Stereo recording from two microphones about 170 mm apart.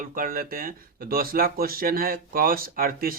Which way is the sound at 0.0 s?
55° right (ahead or behind).